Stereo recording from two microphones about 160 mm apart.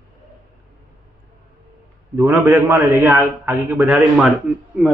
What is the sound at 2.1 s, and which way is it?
A man's voice, 15° right (ahead or behind).